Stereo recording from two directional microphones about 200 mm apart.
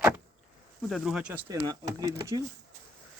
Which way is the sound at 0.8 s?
Centre (ahead or behind).